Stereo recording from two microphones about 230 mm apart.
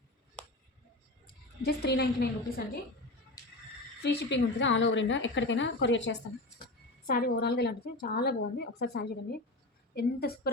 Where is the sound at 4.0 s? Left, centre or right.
Left.